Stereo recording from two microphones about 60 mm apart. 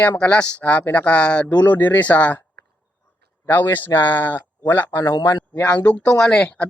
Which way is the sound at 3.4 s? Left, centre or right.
Left.